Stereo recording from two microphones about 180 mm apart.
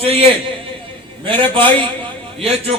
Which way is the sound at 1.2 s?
30° right (ahead or behind).